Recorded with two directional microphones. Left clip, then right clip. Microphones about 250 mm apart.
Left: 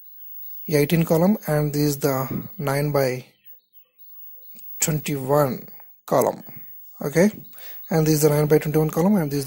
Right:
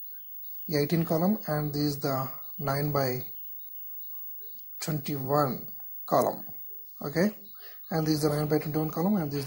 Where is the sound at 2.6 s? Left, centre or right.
Left.